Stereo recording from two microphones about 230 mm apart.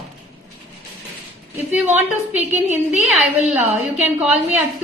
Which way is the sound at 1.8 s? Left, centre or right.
Right.